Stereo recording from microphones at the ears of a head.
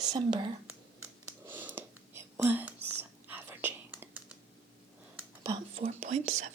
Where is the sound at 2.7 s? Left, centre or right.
Right.